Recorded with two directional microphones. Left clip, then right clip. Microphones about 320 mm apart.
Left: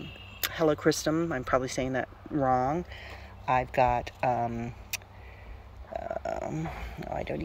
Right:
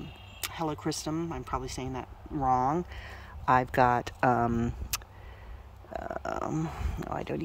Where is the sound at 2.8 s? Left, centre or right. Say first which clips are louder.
Right 1 dB; centre.